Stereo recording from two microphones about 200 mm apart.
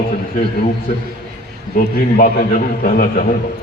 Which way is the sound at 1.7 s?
40° left (ahead or behind).